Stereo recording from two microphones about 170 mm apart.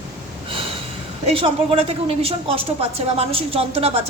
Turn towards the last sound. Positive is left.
turn(degrees=-35)  # may be behind; listen again after turning